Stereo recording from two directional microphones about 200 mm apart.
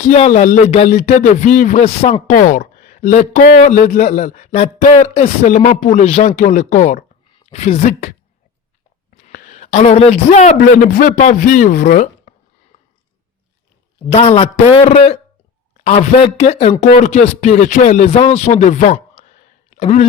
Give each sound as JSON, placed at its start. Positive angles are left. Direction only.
{"t": 0.0, "sound": "a man's voice", "side_deg": 35}
{"t": 14.1, "sound": "a man's voice", "side_deg": 30}